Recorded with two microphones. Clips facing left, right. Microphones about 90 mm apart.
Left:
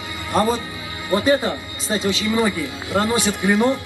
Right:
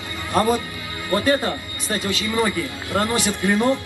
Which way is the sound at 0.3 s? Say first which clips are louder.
Even; 20° left (ahead or behind).